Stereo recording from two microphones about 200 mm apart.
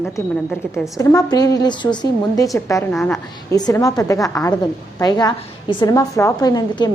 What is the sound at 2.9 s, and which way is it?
Speech, centre (ahead or behind).